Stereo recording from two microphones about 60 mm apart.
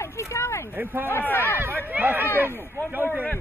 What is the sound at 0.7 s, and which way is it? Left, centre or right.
Speech, right.